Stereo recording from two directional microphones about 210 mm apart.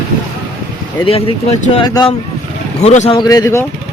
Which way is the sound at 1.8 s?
20° left (ahead or behind).